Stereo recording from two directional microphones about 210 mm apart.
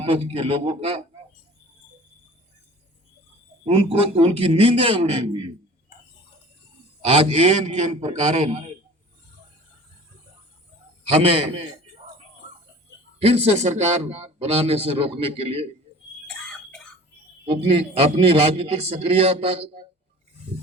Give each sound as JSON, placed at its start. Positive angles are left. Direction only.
{"t": 0.0, "sound": "a man's voice", "side_deg": -25}
{"t": 3.7, "sound": "a man's voice", "side_deg": -30}
{"t": 7.0, "sound": "a man's voice", "side_deg": -30}
{"t": 11.1, "sound": "a man's voice", "side_deg": -30}
{"t": 13.2, "sound": "a man's voice", "side_deg": -30}
{"t": 16.2, "sound": "a sound", "side_deg": 5}
{"t": 17.4, "sound": "a man's voice", "side_deg": -30}